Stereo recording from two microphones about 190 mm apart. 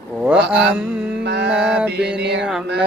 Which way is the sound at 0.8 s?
5° right (ahead or behind).